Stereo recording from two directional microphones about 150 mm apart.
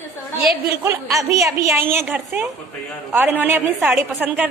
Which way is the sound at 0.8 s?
20° right (ahead or behind).